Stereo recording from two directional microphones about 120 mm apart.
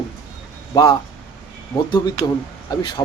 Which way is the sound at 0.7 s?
35° left (ahead or behind).